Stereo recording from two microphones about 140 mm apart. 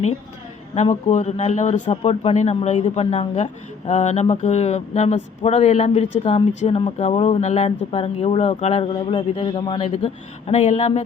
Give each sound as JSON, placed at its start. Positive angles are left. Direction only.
{"t": 1.1, "sound": "speech", "side_deg": 55}
{"t": 7.4, "sound": "speech", "side_deg": 55}